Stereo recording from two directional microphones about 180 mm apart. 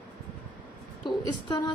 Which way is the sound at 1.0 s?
25° left (ahead or behind).